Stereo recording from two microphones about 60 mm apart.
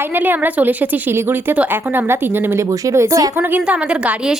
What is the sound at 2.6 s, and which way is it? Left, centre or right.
Speech, right.